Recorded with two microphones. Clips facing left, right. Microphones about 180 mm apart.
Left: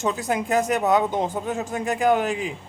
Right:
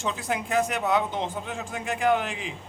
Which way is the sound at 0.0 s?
45° left (ahead or behind).